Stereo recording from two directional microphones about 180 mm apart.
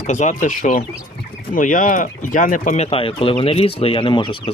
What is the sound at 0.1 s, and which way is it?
Speech, 40° left (ahead or behind).